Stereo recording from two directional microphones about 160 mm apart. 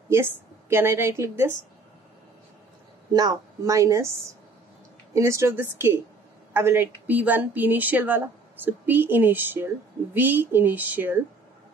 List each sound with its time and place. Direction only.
0.1 s speech: 15° right (ahead or behind)
3.1 s a woman's voice: 25° right (ahead or behind)
5.1 s speech: 15° right (ahead or behind)